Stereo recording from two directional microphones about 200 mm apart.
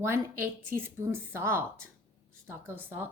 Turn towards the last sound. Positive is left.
turn(degrees=-10)  # may be behind; listen again after turning